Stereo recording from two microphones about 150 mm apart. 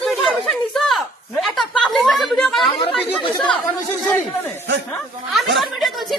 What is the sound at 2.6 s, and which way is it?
Chatter, 35° left (ahead or behind).